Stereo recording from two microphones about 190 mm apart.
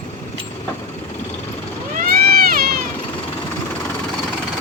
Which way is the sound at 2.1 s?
50° right (ahead or behind).